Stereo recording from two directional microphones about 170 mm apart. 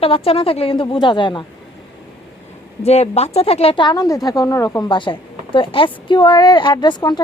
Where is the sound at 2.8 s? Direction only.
40° left (ahead or behind).